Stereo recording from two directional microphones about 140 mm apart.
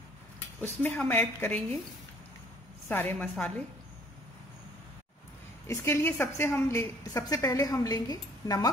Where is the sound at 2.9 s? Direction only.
15° left (ahead or behind).